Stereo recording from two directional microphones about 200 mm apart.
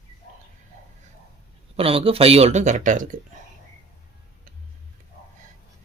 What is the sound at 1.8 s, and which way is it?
Speech, 30° right (ahead or behind).